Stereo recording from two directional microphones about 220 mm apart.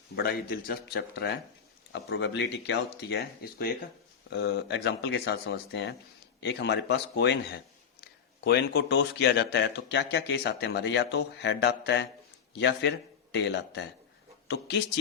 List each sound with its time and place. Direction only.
0.2 s speech: 45° left (ahead or behind)